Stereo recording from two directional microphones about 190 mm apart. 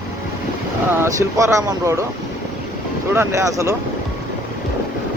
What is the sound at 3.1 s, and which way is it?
Speech, 15° right (ahead or behind).